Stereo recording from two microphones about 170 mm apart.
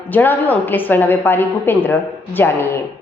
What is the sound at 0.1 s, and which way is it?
A woman's voice, 10° left (ahead or behind).